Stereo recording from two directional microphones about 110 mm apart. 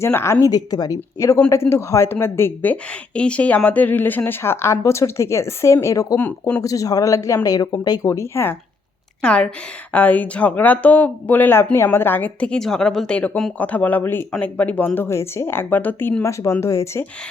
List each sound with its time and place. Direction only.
0.0 s speech: 25° left (ahead or behind)
6.1 s speech: 15° left (ahead or behind)
6.6 s speech: 30° left (ahead or behind)
9.2 s speech: 10° left (ahead or behind); by 17.1 s 25° left (ahead or behind)